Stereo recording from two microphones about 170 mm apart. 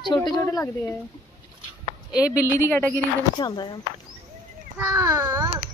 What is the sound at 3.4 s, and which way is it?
Speech, 25° left (ahead or behind).